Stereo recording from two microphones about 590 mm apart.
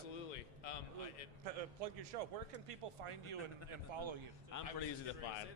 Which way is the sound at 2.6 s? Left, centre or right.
Right.